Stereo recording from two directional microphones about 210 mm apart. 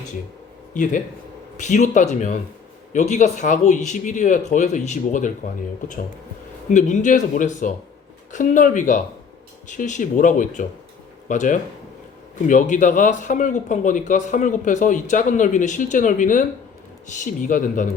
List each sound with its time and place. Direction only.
0.7 s a man's voice: 40° left (ahead or behind)
6.7 s a man's voice: 35° left (ahead or behind)
17.4 s a man's voice: 40° left (ahead or behind)